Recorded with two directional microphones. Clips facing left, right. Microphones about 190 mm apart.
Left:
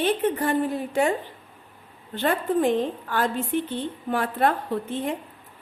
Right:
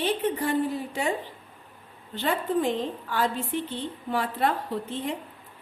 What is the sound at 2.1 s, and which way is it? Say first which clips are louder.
A woman's voice: left 3 dB; 55° left (ahead or behind).